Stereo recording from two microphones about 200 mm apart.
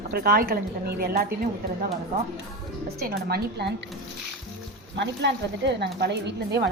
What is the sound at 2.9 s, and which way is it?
Speech, 50° right (ahead or behind).